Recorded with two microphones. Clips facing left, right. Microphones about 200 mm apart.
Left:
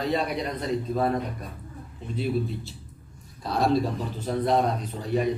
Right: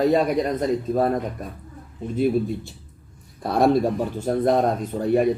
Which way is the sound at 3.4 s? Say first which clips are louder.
Right 5 dB; 55° right (ahead or behind).